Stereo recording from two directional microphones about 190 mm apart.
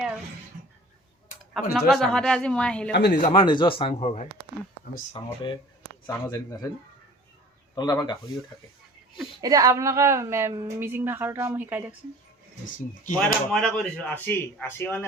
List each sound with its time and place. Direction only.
1.9 s speech: centre (ahead or behind)
3.1 s speech: 40° left (ahead or behind)
3.3 s speech: 25° left (ahead or behind)
7.8 s speech: 20° left (ahead or behind)
9.4 s a woman's voice: 20° right (ahead or behind)
12.6 s speech: 45° left (ahead or behind)
13.1 s speech: 5° left (ahead or behind)